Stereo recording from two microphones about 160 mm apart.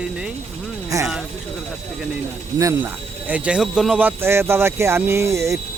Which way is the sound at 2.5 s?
20° right (ahead or behind).